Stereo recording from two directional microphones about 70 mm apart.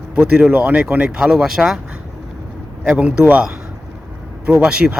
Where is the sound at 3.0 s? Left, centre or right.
Centre.